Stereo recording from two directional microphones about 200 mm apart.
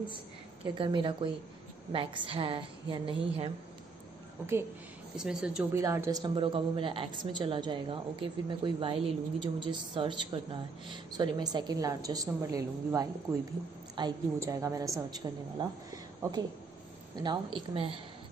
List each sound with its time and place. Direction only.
0.7 s a woman's voice: 25° right (ahead or behind)
5.1 s speech: 5° right (ahead or behind)
5.8 s a woman's voice: 15° right (ahead or behind)